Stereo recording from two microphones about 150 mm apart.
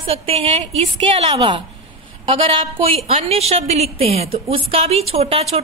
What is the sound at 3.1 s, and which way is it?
A woman's voice, 45° right (ahead or behind).